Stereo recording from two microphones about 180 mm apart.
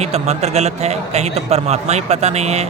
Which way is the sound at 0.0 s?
35° right (ahead or behind).